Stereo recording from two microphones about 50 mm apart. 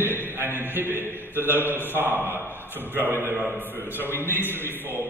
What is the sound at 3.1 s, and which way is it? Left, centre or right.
Mantra, right.